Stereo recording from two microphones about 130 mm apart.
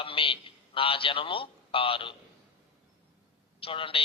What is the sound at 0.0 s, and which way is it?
A man's voice, 45° left (ahead or behind).